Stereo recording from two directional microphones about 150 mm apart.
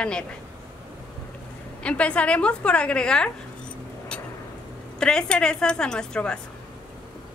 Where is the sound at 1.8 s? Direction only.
5° left (ahead or behind).